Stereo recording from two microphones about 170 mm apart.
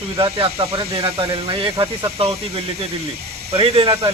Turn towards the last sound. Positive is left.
turn(degrees=-35)  # may be behind; listen again after turning